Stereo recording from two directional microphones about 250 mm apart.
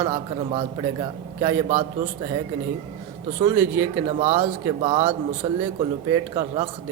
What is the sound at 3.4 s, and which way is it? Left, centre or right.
Speech, centre.